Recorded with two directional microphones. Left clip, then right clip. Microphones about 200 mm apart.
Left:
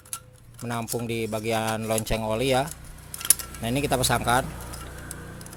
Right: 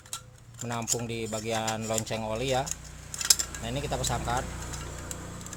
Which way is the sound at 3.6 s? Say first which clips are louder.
Left 9 dB; 35° left (ahead or behind).